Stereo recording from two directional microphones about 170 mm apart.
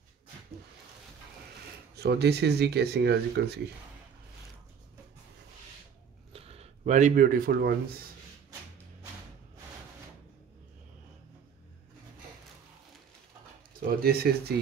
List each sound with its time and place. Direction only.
2.0 s speech: 75° right (ahead or behind)
6.3 s a sound: 35° right (ahead or behind); by 7.7 s 55° right (ahead or behind)
13.7 s speech: 65° right (ahead or behind)